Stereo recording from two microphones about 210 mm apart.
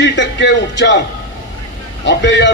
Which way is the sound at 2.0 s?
55° left (ahead or behind).